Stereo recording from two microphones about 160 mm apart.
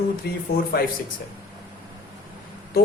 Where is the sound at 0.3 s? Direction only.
80° left.